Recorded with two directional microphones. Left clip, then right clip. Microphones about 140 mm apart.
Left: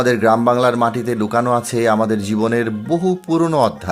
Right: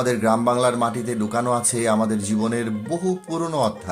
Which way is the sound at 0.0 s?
50° left (ahead or behind).